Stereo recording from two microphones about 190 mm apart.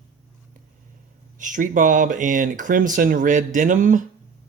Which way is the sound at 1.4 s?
45° right (ahead or behind).